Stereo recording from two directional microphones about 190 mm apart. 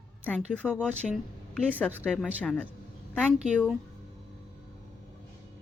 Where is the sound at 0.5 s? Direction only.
5° left (ahead or behind).